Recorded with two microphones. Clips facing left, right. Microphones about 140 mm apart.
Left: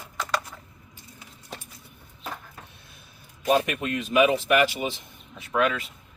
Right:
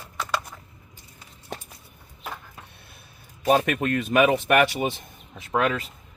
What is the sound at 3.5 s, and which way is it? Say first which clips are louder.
Speech: right 2 dB; 50° right (ahead or behind).